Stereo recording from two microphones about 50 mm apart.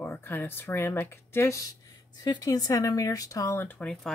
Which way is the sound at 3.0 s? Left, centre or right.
Left.